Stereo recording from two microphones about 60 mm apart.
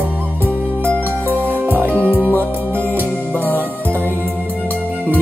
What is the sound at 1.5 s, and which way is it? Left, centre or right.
Music, right.